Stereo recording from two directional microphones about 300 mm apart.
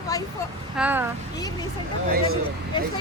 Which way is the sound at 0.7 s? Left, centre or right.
Centre.